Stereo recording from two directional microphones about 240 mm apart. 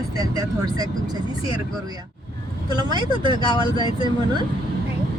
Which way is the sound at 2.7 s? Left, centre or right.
Centre.